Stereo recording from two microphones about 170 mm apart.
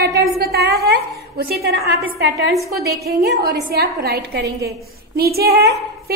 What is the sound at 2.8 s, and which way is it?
A woman's voice, 70° right (ahead or behind).